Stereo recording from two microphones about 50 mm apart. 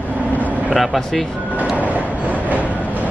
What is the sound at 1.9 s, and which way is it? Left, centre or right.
Train, right.